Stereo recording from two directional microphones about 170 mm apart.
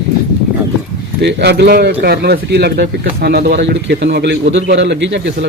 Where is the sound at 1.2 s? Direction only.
85° right.